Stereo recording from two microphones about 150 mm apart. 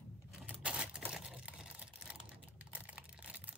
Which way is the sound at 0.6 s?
5° right (ahead or behind).